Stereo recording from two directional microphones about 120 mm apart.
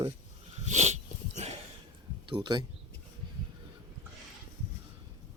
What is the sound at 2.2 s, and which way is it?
Speech, 40° right (ahead or behind).